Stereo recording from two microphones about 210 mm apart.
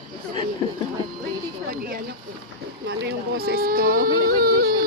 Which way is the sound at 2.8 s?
50° right (ahead or behind).